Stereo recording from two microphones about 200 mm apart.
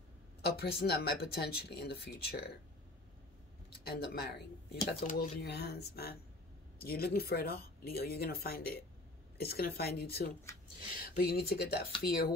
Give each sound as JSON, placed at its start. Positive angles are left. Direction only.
{"t": 0.4, "sound": "speech", "side_deg": 50}
{"t": 3.8, "sound": "speech", "side_deg": 50}
{"t": 5.0, "sound": "speech", "side_deg": 40}
{"t": 5.5, "sound": "speech", "side_deg": 55}